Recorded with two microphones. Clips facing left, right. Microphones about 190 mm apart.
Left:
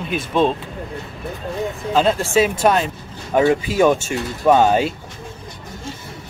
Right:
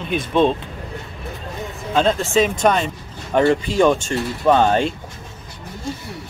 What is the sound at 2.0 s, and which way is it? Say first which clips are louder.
Speech: even; 5° left (ahead or behind).